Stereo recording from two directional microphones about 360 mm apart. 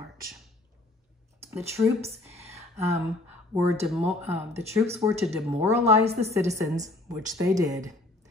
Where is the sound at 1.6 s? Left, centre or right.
Centre.